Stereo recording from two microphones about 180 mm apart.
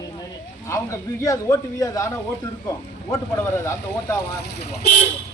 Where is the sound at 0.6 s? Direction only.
15° left (ahead or behind).